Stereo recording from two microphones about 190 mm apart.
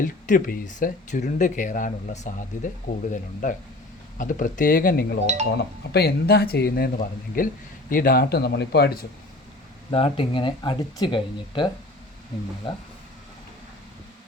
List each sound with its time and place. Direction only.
0.0 s speech: 45° left (ahead or behind)
5.2 s speech: 35° right (ahead or behind)
5.9 s speech: 55° left (ahead or behind)
9.9 s speech: 30° left (ahead or behind)